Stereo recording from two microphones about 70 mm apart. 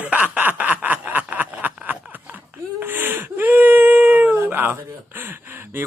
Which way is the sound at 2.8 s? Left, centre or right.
Right.